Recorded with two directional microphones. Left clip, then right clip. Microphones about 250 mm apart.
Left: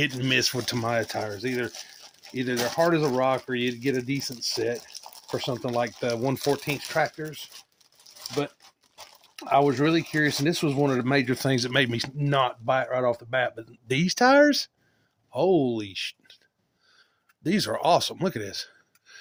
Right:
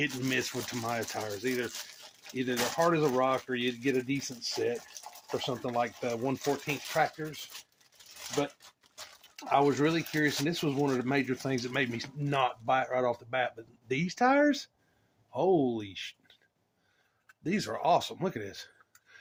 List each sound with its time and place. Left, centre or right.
0.0 s speech: left
9.3 s speech: left
17.4 s speech: left